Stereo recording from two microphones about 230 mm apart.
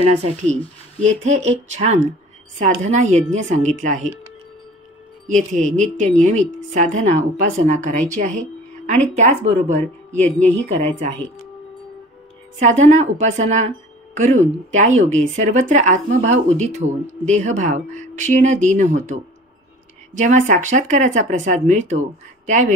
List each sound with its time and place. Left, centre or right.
0.0 s a woman's voice: right
5.3 s a woman's voice: right
12.5 s a woman's voice: right